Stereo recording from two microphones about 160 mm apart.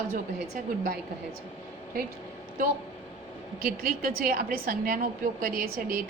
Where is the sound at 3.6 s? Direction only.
65° right (ahead or behind).